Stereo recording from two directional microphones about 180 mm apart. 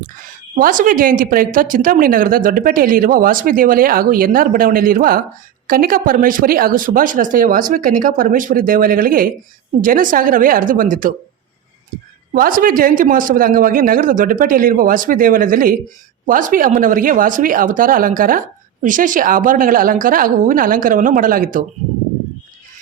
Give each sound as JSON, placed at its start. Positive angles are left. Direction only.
{"t": 0.5, "sound": "speech", "side_deg": -50}
{"t": 12.3, "sound": "speech", "side_deg": -50}